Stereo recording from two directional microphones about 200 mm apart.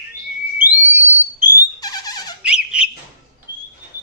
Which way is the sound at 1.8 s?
20° left (ahead or behind).